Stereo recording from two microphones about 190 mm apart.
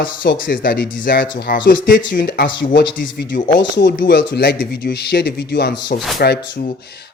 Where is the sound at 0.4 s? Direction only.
50° left (ahead or behind).